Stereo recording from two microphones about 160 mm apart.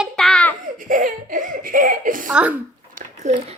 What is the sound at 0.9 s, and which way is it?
Giggle, 60° right (ahead or behind).